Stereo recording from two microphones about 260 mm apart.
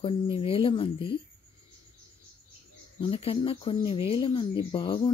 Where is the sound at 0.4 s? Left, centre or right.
Left.